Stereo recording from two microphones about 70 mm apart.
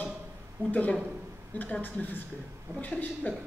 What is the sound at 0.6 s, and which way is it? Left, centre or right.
Speech, right.